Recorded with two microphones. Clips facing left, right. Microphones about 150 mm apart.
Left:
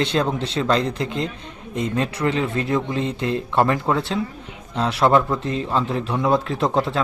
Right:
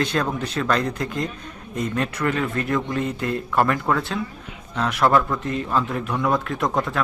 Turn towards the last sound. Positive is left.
turn(degrees=30)  # may be behind; listen again after turning